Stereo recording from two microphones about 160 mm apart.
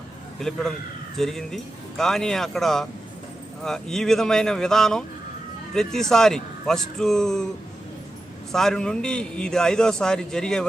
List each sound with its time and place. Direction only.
0.3 s a man's voice: centre (ahead or behind)
8.5 s a man's voice: 5° left (ahead or behind)